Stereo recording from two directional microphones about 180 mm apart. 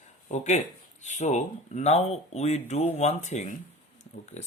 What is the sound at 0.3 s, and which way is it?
Speech, 40° left (ahead or behind).